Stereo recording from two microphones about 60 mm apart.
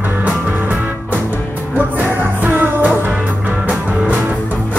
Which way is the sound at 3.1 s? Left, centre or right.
Right.